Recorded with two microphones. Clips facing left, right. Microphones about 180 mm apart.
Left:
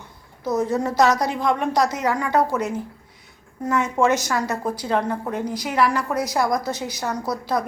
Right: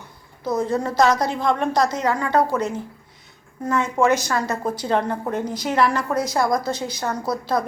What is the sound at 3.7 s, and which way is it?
Speech, 20° left (ahead or behind).